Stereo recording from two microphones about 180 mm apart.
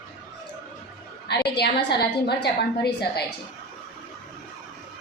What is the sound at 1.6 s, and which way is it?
A woman's voice, 65° left (ahead or behind).